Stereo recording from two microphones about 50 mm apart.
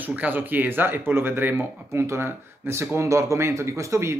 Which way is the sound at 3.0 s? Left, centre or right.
Right.